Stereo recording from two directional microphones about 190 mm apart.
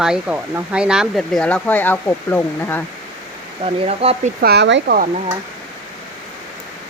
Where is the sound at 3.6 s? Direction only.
30° right (ahead or behind).